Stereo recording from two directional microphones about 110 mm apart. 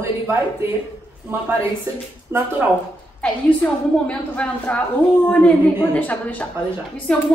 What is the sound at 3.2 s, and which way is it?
A woman's voice, 10° left (ahead or behind).